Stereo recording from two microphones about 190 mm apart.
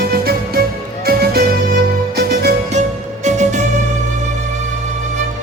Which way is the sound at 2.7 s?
40° right (ahead or behind).